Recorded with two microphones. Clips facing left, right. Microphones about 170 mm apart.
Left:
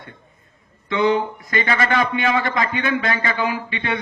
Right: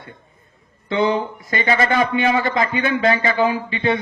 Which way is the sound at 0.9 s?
30° right (ahead or behind).